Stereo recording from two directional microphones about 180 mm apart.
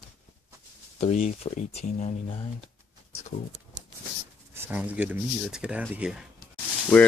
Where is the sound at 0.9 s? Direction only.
40° left (ahead or behind).